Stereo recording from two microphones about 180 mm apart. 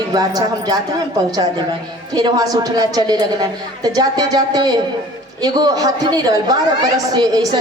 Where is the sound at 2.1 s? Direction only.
20° right (ahead or behind).